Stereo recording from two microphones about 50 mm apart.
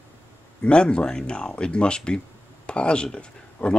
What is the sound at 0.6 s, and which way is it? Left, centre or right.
Speech, left.